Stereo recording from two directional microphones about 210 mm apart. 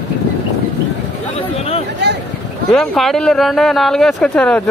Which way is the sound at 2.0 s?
55° right (ahead or behind).